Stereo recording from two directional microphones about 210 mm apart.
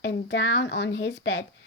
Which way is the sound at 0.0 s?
55° left (ahead or behind).